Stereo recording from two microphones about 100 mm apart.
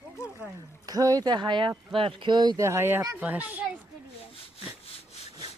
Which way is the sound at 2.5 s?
30° right (ahead or behind).